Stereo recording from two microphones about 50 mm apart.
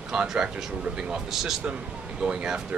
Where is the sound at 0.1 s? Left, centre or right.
Centre.